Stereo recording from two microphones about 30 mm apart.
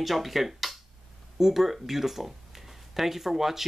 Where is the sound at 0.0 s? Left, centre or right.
Centre.